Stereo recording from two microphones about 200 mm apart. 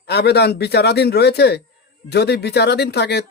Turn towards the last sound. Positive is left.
turn(degrees=55)  # may be behind; listen again after turning